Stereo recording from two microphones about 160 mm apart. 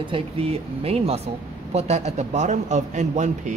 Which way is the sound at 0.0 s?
35° right (ahead or behind).